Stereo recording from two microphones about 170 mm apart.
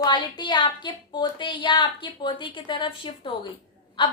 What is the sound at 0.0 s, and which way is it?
A woman's voice, 25° left (ahead or behind).